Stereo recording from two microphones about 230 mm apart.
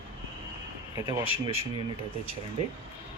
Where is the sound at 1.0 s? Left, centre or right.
Centre.